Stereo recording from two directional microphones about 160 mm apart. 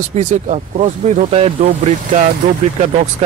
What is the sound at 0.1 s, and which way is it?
Speech, 45° right (ahead or behind).